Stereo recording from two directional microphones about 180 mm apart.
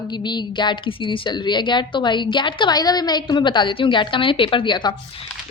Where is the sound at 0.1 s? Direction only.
25° left (ahead or behind).